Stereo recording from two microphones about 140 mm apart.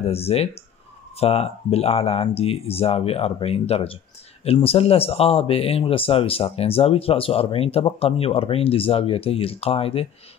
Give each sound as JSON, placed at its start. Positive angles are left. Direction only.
{"t": 0.0, "sound": "speech", "side_deg": 45}